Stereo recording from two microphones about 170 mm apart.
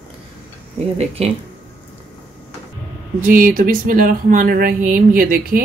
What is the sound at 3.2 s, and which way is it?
Speech, 50° right (ahead or behind).